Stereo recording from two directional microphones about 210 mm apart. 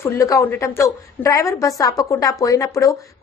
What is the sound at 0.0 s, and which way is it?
A woman's voice, 15° left (ahead or behind).